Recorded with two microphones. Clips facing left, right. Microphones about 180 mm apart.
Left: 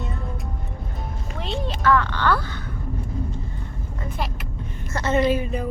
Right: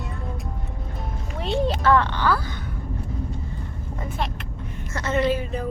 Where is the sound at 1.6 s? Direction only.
30° right (ahead or behind).